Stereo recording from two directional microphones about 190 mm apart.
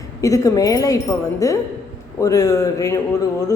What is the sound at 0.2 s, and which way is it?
A woman's voice, 15° left (ahead or behind).